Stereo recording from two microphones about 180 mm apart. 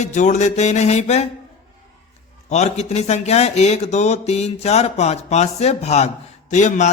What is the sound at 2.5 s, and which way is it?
Speech, 40° left (ahead or behind).